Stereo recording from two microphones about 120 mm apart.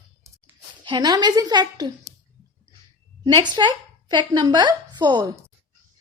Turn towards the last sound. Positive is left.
turn(degrees=-35)  # may be behind; listen again after turning